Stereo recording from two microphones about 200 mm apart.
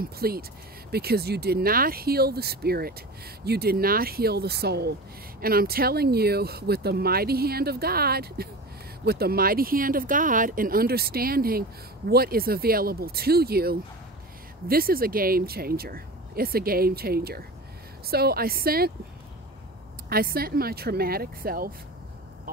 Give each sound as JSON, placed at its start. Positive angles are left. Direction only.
{"t": 0.0, "sound": "speech", "side_deg": -50}
{"t": 20.1, "sound": "speech", "side_deg": -50}